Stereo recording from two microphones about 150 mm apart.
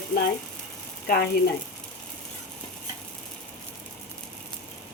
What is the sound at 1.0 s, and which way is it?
Speech, 90° left.